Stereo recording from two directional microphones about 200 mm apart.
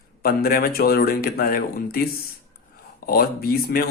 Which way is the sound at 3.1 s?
50° left (ahead or behind).